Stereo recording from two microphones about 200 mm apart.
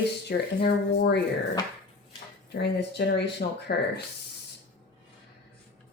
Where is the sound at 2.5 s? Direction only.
55° left (ahead or behind).